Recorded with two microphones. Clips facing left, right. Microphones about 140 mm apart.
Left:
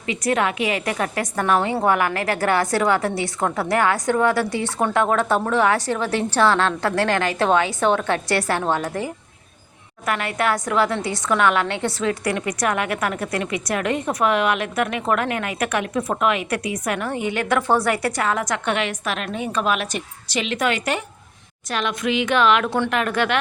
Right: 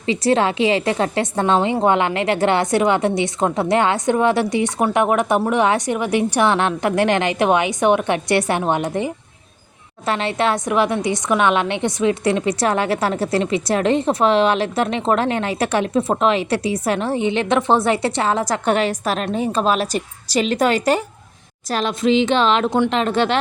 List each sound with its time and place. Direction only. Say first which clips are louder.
0.0 s a woman's voice: right 4 dB; 30° right (ahead or behind)